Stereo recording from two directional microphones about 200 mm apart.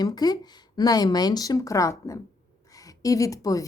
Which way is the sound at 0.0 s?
20° left (ahead or behind).